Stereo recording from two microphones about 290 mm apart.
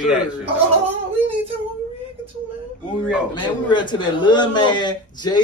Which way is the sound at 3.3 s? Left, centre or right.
Centre.